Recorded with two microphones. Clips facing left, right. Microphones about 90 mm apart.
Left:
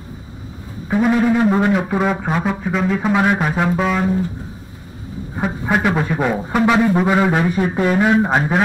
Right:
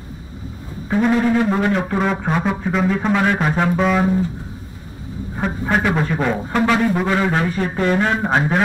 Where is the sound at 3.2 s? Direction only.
15° left (ahead or behind).